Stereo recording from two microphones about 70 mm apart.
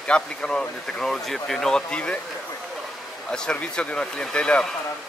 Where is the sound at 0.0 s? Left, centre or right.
Centre.